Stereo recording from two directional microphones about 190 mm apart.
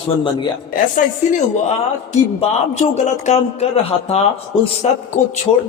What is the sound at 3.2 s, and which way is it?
A man's voice, 35° left (ahead or behind).